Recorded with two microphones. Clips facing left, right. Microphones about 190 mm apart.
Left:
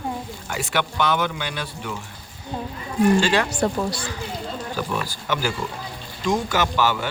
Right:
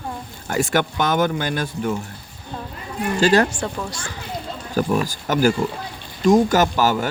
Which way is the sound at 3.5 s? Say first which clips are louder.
Left 5 dB; 40° left (ahead or behind).